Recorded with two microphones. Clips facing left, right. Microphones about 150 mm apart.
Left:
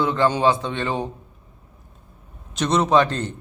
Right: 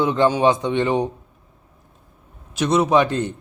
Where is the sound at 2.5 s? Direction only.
10° right (ahead or behind).